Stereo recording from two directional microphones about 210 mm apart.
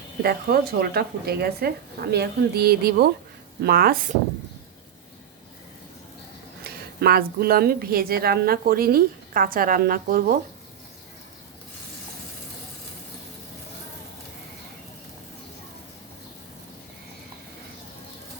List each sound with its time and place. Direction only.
0.2 s a woman's voice: 45° right (ahead or behind)
6.7 s a woman's voice: 50° right (ahead or behind)